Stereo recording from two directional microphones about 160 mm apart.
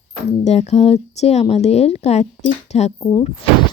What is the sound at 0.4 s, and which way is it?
Speech, 45° left (ahead or behind).